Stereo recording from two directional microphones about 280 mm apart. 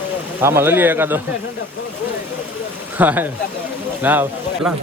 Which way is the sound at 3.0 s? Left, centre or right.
Centre.